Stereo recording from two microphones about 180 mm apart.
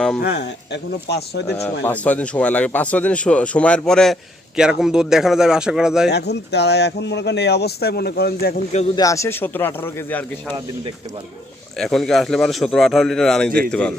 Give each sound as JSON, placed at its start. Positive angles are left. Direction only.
{"t": 0.2, "sound": "speech", "side_deg": 65}
{"t": 1.5, "sound": "a man's voice", "side_deg": 10}
{"t": 6.1, "sound": "speech", "side_deg": 65}
{"t": 9.0, "sound": "a man's voice", "side_deg": 15}
{"t": 11.8, "sound": "a man's voice", "side_deg": 5}